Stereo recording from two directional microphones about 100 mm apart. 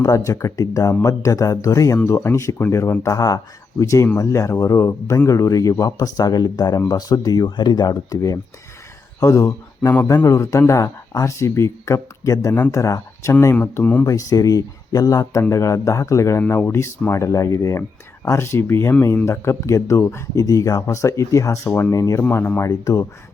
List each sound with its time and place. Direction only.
0.0 s speech: 35° left (ahead or behind)
13.6 s speech: 15° left (ahead or behind)
14.1 s speech: 35° left (ahead or behind)
22.2 s speech: 20° left (ahead or behind)
22.7 s speech: 35° left (ahead or behind)